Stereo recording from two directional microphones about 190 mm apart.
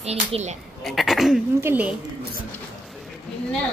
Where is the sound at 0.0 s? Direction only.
35° right (ahead or behind).